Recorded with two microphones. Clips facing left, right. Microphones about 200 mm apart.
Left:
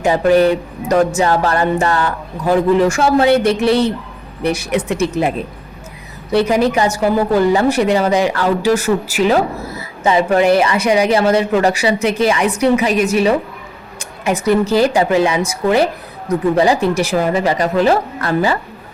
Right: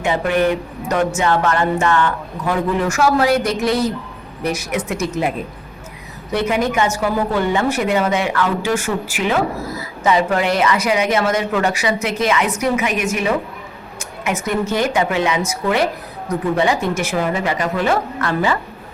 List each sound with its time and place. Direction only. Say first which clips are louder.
0.0 s a woman's voice: left 5 dB; 35° left (ahead or behind)
6.3 s a woman's voice: left 5 dB; 35° left (ahead or behind)